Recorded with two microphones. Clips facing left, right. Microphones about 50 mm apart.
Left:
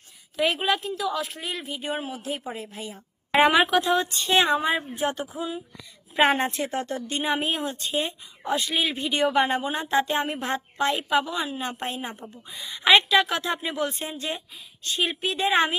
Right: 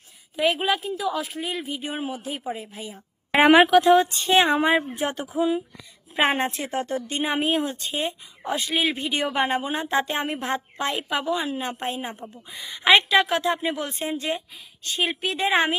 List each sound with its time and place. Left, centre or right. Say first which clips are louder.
0.3 s speech: right 1 dB; centre
3.3 s a woman's voice: right 4 dB; right
6.1 s a woman's voice: left 1 dB; right
6.7 s speech: right 2 dB; centre
7.2 s a woman's voice: right 3 dB; right
7.9 s a woman's voice: even; right
9.0 s a woman's voice: left 2 dB; right